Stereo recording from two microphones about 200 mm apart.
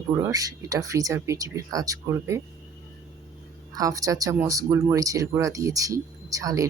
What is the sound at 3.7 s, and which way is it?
Speech, 15° right (ahead or behind).